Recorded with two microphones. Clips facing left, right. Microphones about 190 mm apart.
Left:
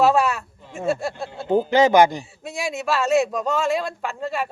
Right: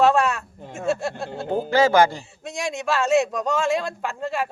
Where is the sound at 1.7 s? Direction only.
20° left (ahead or behind).